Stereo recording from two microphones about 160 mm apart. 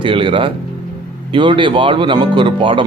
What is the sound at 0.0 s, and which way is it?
Speech, 30° right (ahead or behind).